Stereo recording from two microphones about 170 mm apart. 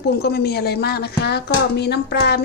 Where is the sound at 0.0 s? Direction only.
70° left (ahead or behind).